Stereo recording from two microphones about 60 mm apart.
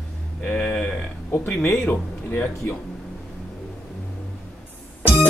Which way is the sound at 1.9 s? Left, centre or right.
Left.